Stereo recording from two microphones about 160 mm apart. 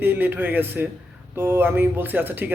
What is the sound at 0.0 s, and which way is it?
Speech, 10° right (ahead or behind).